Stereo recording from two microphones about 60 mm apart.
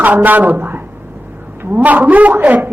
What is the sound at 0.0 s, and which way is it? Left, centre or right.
A woman's voice, right.